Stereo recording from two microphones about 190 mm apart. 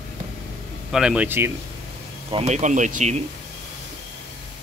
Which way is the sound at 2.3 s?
35° right (ahead or behind).